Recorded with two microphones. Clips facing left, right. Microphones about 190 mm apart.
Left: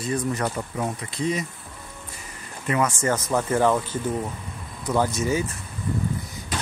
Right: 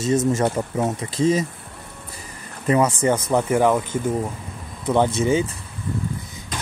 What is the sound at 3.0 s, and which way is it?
Speech, 15° right (ahead or behind).